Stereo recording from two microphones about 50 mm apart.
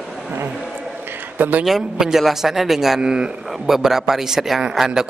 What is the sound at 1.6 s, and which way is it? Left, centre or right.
A man's voice, centre.